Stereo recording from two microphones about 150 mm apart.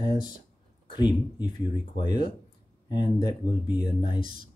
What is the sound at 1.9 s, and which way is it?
Speech, 30° left (ahead or behind).